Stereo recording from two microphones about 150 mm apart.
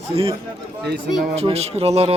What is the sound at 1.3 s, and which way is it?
Speech, 45° right (ahead or behind).